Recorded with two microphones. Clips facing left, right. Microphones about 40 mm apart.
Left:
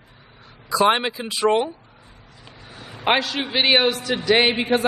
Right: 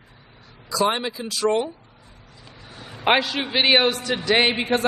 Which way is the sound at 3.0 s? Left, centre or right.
Centre.